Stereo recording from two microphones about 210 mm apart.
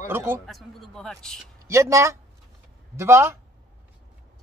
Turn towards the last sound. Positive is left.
turn(degrees=-10)  # may be behind; listen again after turning